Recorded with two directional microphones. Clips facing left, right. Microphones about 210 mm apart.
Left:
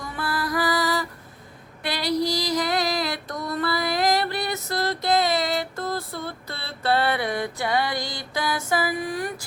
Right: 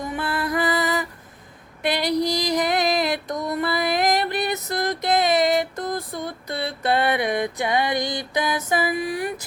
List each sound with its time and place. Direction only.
0.0 s music: 20° right (ahead or behind)